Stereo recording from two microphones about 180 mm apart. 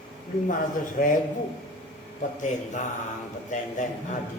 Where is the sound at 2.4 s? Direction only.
45° left (ahead or behind).